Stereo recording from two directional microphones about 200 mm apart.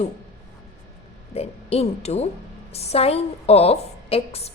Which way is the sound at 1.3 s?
30° left (ahead or behind).